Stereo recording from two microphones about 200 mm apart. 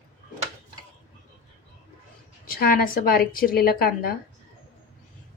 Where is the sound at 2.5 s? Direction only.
50° left (ahead or behind).